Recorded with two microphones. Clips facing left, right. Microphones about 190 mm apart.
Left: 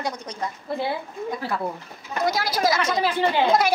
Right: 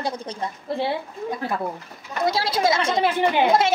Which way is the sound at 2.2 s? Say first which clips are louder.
Right 1 dB; 25° right (ahead or behind).